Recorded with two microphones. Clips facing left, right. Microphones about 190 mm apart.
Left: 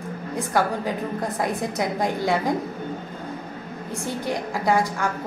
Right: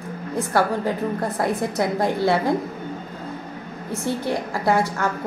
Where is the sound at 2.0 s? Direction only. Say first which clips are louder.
Right 3 dB; 15° left (ahead or behind).